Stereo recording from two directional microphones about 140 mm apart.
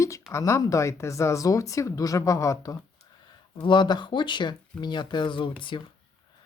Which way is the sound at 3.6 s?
35° left (ahead or behind).